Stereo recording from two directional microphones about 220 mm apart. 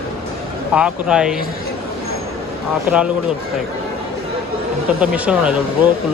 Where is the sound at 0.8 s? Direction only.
5° right (ahead or behind).